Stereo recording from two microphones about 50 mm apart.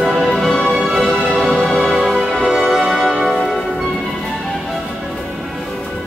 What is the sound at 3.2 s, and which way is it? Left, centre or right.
Change ringing, centre.